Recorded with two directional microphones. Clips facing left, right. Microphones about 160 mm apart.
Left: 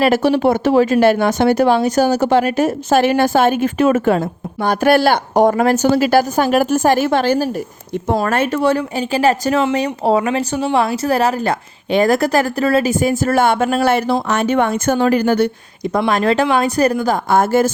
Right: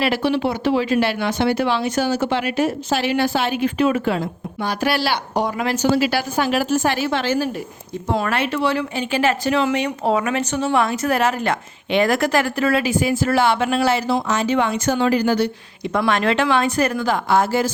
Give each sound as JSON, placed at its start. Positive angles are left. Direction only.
{"t": 0.0, "sound": "speech", "side_deg": 45}
{"t": 16.0, "sound": "speech", "side_deg": 35}